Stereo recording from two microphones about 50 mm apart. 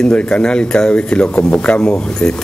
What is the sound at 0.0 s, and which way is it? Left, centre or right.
Speech, left.